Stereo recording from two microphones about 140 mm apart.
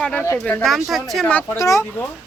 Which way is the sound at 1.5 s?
20° left (ahead or behind).